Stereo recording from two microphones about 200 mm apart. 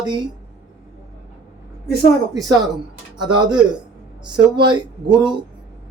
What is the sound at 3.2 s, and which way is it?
Speech, 20° right (ahead or behind).